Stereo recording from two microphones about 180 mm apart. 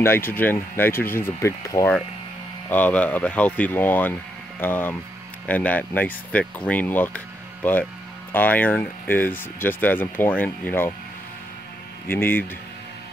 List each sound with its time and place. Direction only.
0.0 s speech: 10° left (ahead or behind)
12.1 s speech: 10° left (ahead or behind)